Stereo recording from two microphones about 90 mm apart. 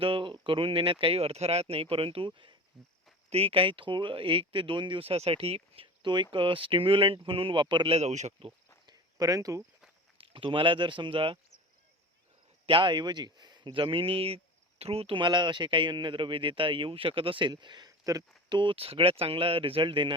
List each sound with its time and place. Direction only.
0.0 s speech: 80° right
3.3 s a man's voice: 90° right; by 7.9 s 60° right (ahead or behind)
8.4 s speech: 90° right
8.9 s cricket: 40° right (ahead or behind)
10.2 s a man's voice: 80° right
12.6 s speech: 70° right (ahead or behind); by 13.7 s 50° right (ahead or behind)
13.7 s a man's voice: 75° right (ahead or behind); by 18.3 s 40° right (ahead or behind)
18.4 s speech: 60° right (ahead or behind)